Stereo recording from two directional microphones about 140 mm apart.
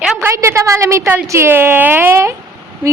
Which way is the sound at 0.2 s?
20° right (ahead or behind).